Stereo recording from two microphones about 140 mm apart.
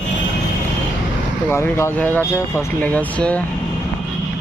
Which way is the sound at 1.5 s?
20° left (ahead or behind).